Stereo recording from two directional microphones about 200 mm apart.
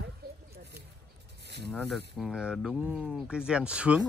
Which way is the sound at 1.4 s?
55° right (ahead or behind).